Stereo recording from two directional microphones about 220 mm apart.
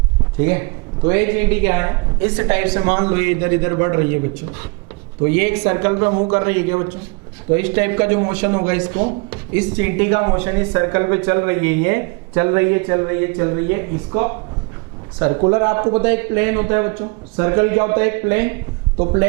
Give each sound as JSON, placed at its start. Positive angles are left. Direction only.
{"t": 0.4, "sound": "speech", "side_deg": -15}
{"t": 18.9, "sound": "speech", "side_deg": -30}